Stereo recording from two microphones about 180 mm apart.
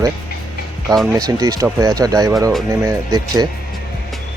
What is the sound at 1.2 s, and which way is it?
Speech, 20° right (ahead or behind).